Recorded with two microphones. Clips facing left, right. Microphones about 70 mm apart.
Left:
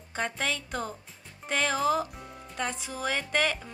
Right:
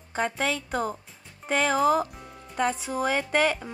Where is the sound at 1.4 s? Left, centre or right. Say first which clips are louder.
Right 5 dB; centre.